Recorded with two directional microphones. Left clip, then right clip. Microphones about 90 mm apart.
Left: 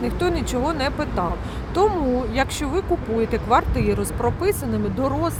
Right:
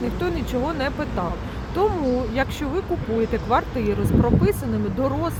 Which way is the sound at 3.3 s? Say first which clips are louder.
Left 5 dB; 25° left (ahead or behind).